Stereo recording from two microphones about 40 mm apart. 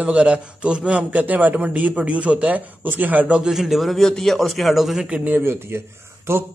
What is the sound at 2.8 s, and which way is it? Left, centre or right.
Speech, right.